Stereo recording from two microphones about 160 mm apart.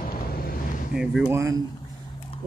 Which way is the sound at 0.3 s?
65° left (ahead or behind).